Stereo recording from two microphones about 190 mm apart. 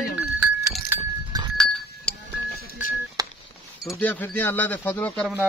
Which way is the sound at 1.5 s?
5° left (ahead or behind).